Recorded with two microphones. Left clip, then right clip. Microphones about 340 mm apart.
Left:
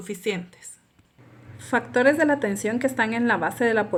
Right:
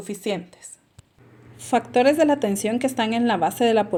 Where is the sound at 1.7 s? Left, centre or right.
Right.